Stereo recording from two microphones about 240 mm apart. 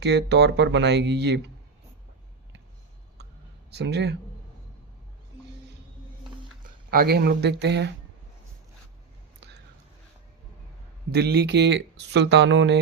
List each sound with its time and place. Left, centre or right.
0.0 s speech: right
3.7 s speech: right
6.9 s speech: right
11.1 s speech: right